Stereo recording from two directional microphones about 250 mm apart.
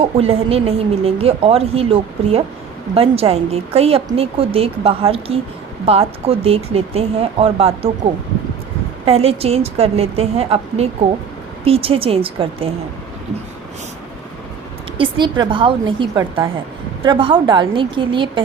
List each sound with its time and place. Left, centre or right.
0.0 s a woman's voice: right
9.0 s a woman's voice: right
15.2 s a woman's voice: centre